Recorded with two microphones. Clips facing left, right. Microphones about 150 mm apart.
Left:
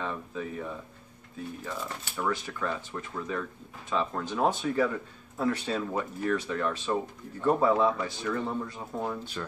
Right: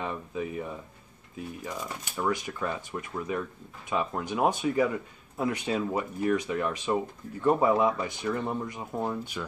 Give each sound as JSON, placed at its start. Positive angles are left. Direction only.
{"t": 0.0, "sound": "speech", "side_deg": -15}